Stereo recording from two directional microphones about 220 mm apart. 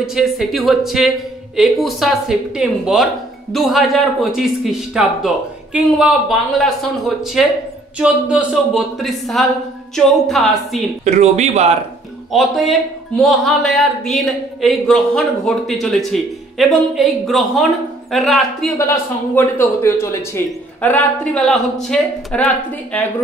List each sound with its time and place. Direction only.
0.0 s speech: centre (ahead or behind)
11.1 s speech: 30° right (ahead or behind)
12.3 s speech: centre (ahead or behind)
18.8 s a man's voice: 10° left (ahead or behind)